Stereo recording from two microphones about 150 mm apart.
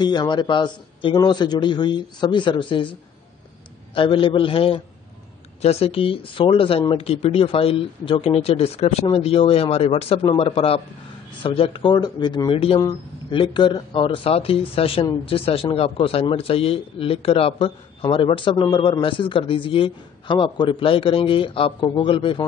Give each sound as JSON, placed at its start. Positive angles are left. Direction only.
{"t": 0.0, "sound": "a man's voice", "side_deg": 30}